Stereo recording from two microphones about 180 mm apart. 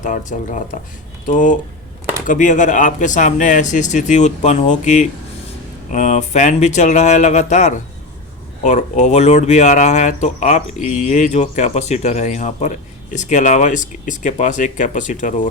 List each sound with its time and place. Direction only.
0.0 s speech: 45° left (ahead or behind)